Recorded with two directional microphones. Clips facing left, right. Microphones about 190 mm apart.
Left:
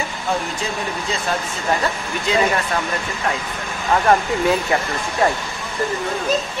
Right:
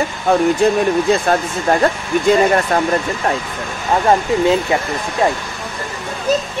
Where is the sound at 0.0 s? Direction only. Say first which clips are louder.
Right 9 dB; 60° right (ahead or behind).